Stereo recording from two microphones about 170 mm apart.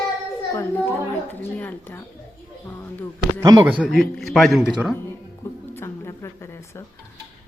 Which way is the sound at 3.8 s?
Centre (ahead or behind).